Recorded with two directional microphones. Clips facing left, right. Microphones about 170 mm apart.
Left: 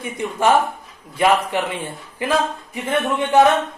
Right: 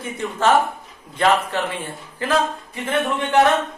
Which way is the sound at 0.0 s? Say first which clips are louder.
Left 1 dB; 15° left (ahead or behind).